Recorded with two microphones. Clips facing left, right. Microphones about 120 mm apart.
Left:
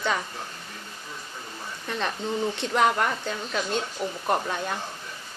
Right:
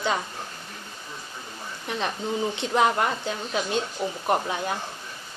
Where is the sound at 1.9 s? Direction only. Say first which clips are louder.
Right 1 dB; 15° right (ahead or behind).